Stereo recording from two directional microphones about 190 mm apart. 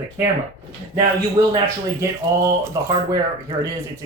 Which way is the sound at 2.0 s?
15° right (ahead or behind).